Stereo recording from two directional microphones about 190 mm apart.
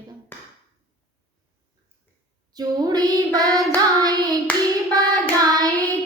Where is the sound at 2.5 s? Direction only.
20° right (ahead or behind).